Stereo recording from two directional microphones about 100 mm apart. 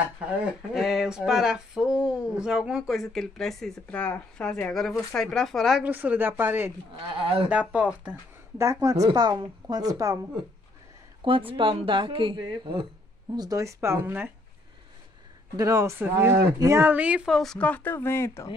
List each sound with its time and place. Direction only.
0.0 s speech: 15° right (ahead or behind)
0.7 s speech: 5° right (ahead or behind)
3.8 s speech: 15° left (ahead or behind)
5.8 s speech: 15° right (ahead or behind)
8.8 s a woman's voice: 35° right (ahead or behind)
11.2 s speech: 60° right (ahead or behind)
13.4 s speech: 35° right (ahead or behind)
15.5 s a woman's voice: 35° right (ahead or behind)
16.8 s speech: 15° right (ahead or behind)
17.3 s speech: centre (ahead or behind)
17.6 s speech: 15° left (ahead or behind)